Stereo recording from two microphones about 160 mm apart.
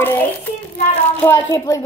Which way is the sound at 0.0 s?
10° left (ahead or behind).